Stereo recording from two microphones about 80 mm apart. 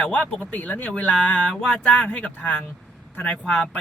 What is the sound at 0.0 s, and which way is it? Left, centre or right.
Speech, centre.